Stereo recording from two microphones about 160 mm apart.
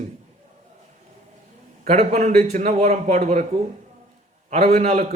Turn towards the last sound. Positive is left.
turn(degrees=-45)  # may be behind; listen again after turning